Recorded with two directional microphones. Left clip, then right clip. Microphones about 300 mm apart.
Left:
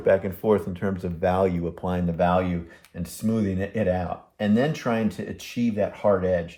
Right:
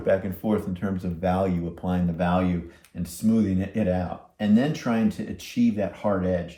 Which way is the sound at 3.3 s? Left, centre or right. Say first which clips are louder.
Right 1 dB; left.